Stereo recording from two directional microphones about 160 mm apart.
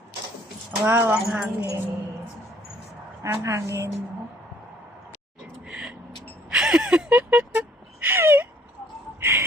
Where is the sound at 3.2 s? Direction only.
20° right (ahead or behind).